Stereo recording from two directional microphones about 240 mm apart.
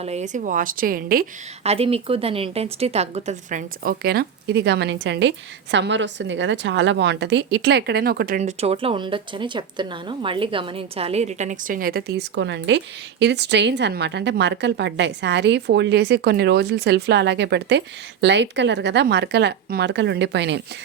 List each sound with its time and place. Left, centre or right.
0.0 s a woman's voice: right
1.6 s speech: right
8.4 s speech: right